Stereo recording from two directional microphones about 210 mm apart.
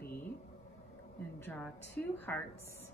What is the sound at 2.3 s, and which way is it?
Speech, 10° left (ahead or behind).